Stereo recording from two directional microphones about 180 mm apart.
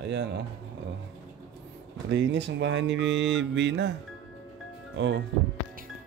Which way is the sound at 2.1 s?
80° right.